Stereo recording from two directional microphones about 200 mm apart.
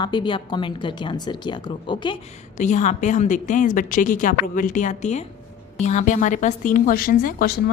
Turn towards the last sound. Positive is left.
turn(degrees=45)  # may be behind; listen again after turning